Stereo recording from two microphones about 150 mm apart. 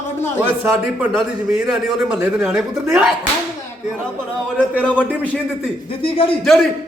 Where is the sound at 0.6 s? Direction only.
10° right (ahead or behind).